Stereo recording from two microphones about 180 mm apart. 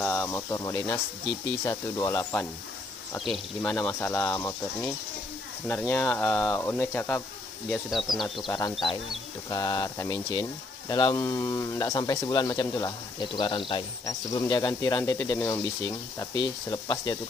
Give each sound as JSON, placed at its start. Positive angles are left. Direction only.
{"t": 0.0, "sound": "speech", "side_deg": 15}
{"t": 8.5, "sound": "speech", "side_deg": 20}